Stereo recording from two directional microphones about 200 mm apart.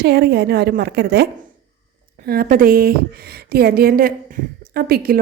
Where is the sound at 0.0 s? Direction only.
55° right (ahead or behind).